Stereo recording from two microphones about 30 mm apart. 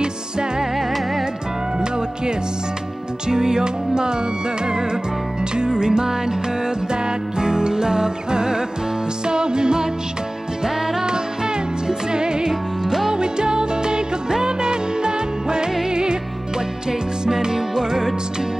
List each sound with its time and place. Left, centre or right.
3.3 s music: right
5.6 s music: right
17.4 s music: centre